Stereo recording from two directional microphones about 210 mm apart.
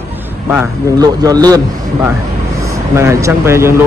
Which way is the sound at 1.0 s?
20° right (ahead or behind).